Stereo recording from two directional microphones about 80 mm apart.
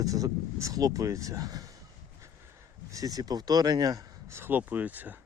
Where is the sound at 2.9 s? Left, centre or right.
Right.